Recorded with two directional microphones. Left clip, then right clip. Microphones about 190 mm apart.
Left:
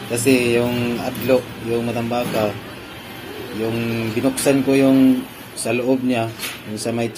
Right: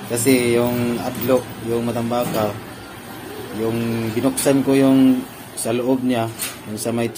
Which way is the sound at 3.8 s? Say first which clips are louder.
Even; 5° right (ahead or behind).